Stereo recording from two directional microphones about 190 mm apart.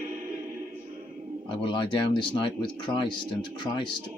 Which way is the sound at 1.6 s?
25° left (ahead or behind).